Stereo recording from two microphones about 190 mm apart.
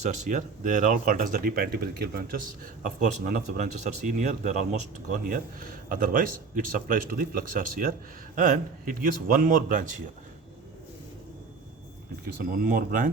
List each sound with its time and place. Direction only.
0.0 s speech: 40° right (ahead or behind)
2.8 s speech: 45° right (ahead or behind)
12.2 s speech: 50° right (ahead or behind)